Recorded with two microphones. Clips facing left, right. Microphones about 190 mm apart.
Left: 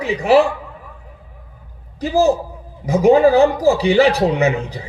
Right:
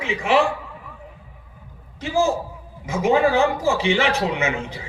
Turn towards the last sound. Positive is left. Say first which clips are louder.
# left 7 dB
turn(degrees=35)  # may be behind; listen again after turning